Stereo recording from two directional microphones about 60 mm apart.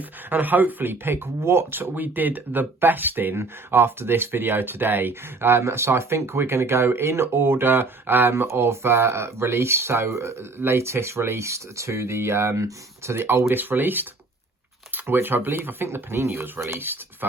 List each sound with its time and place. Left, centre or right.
0.3 s speech: right